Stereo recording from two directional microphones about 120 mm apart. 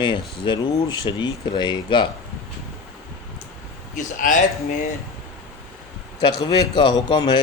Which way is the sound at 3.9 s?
90° left.